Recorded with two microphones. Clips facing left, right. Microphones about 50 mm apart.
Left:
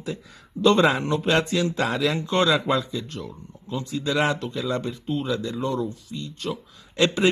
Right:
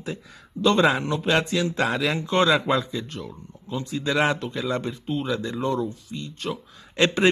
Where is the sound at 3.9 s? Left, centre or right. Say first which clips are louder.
Right 1 dB; right.